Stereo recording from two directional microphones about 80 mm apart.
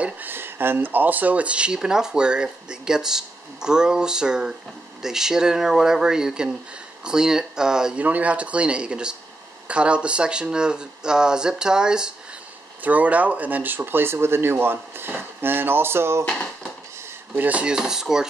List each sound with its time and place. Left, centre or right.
0.0 s speech: right
16.3 s a sound: centre
17.4 s speech: centre